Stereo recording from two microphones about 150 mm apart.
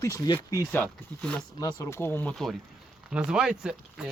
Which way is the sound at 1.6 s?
25° left (ahead or behind).